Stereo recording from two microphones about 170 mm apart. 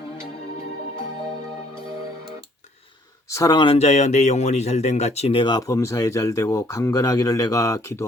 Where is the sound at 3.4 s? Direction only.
25° left (ahead or behind).